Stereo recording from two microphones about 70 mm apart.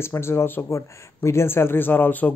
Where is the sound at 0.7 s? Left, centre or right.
Left.